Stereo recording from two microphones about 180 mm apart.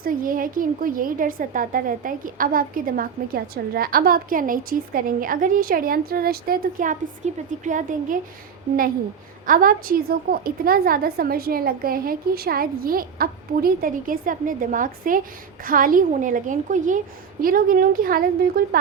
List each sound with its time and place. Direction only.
0.0 s a woman's voice: 50° right (ahead or behind)
7.2 s a woman's voice: 40° right (ahead or behind)
9.5 s a woman's voice: 50° right (ahead or behind)